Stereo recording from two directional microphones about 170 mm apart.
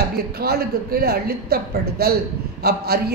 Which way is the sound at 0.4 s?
65° right (ahead or behind).